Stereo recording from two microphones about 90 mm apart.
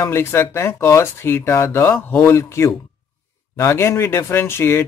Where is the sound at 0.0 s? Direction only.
30° left (ahead or behind).